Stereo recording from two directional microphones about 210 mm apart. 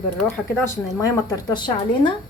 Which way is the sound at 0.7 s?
15° left (ahead or behind).